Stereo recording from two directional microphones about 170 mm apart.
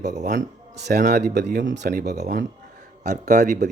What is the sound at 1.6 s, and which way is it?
Speech, 90° right.